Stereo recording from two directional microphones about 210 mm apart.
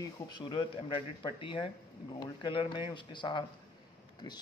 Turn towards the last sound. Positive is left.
turn(degrees=20)  # may be behind; listen again after turning